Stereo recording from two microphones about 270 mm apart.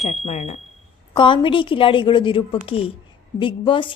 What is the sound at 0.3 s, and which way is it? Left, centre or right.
A woman's voice, left.